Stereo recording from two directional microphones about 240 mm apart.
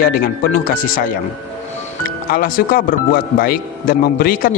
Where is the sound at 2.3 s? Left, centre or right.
Left.